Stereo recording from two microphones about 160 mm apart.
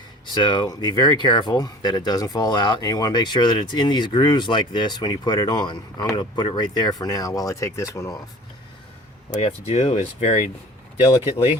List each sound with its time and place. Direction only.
0.3 s speech: 25° left (ahead or behind)
9.3 s speech: 45° left (ahead or behind)